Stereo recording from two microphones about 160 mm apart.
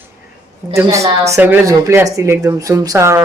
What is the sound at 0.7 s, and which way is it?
Speech, 20° right (ahead or behind).